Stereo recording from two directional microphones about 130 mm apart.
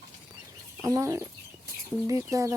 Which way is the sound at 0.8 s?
25° right (ahead or behind).